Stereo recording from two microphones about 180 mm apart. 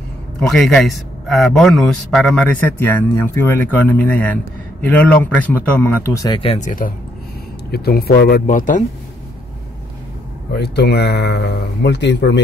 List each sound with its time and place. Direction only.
0.4 s a man's voice: 5° left (ahead or behind)
6.1 s speech: 25° left (ahead or behind)
7.7 s speech: 60° left (ahead or behind)
10.5 s speech: 65° left (ahead or behind)